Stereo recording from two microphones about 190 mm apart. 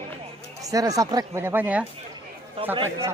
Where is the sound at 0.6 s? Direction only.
20° right (ahead or behind).